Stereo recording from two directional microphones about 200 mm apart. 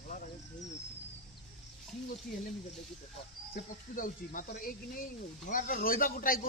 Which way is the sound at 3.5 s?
45° left (ahead or behind).